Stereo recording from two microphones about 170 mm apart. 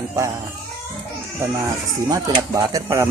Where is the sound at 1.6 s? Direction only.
20° right (ahead or behind).